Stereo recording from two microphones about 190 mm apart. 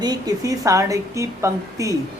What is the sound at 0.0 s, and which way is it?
Speech, 20° right (ahead or behind).